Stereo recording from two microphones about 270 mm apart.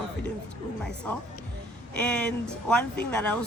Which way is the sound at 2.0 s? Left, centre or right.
Centre.